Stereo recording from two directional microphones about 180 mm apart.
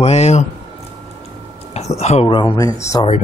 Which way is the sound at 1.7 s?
35° left (ahead or behind).